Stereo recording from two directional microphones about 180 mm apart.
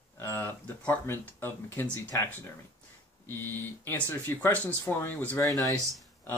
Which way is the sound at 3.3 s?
10° left (ahead or behind).